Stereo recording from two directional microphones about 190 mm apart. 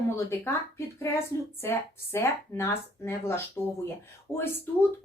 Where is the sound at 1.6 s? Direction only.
15° left (ahead or behind).